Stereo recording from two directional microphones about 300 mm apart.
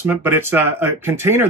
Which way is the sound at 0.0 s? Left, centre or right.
Centre.